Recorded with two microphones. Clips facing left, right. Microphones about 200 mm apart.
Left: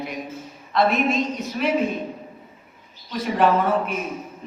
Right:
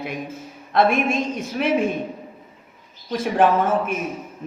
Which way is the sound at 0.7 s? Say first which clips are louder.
Right 2 dB; 50° right (ahead or behind).